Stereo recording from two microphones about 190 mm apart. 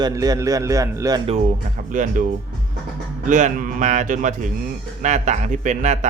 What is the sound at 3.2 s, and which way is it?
A man's voice, 40° right (ahead or behind).